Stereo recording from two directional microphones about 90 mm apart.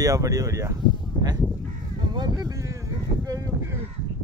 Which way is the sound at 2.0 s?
50° right (ahead or behind).